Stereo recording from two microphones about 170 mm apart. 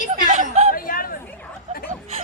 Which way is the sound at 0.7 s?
60° left (ahead or behind).